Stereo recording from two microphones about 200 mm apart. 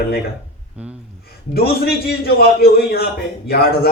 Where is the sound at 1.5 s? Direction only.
50° left (ahead or behind).